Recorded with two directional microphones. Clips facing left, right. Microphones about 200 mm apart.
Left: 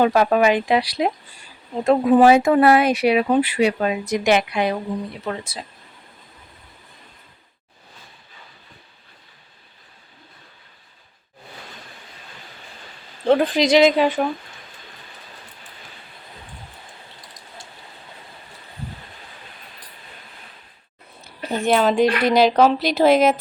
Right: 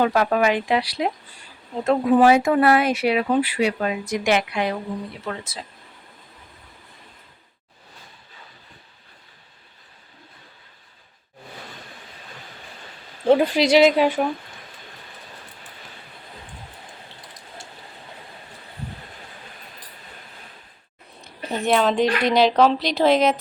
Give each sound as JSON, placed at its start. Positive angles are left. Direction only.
{"t": 0.0, "sound": "a woman's voice", "side_deg": 20}
{"t": 13.2, "sound": "speech", "side_deg": -10}
{"t": 21.2, "sound": "speech", "side_deg": 0}